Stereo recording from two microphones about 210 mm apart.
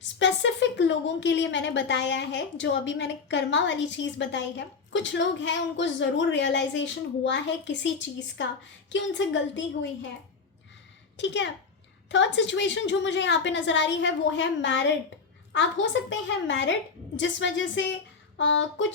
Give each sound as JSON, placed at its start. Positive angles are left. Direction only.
{"t": 0.0, "sound": "a woman's voice", "side_deg": 60}
{"t": 11.2, "sound": "a woman's voice", "side_deg": 60}